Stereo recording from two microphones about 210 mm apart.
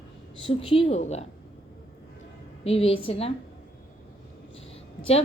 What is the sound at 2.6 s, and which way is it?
Speech, 30° left (ahead or behind).